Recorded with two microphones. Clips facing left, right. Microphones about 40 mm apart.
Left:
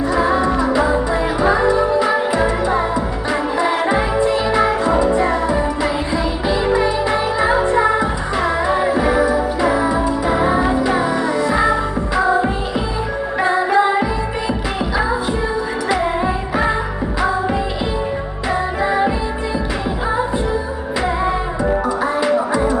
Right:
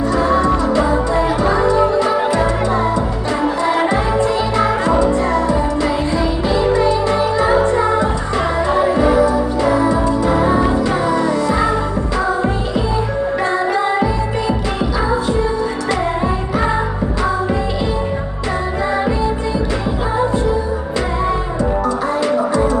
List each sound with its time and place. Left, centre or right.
0.0 s music: centre
15.9 s music: centre
18.9 s music: centre
21.2 s music: centre